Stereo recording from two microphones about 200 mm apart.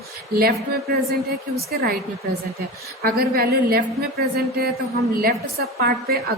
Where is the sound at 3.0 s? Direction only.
50° right (ahead or behind).